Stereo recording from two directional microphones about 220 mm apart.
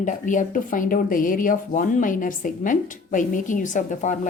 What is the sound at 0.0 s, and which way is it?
Speech, 35° left (ahead or behind).